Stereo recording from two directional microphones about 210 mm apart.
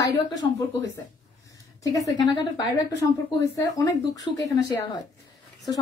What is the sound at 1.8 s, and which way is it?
Speech, 15° left (ahead or behind).